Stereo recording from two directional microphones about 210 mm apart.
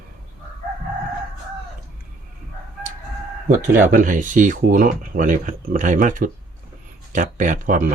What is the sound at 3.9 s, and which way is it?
Speech, 40° right (ahead or behind).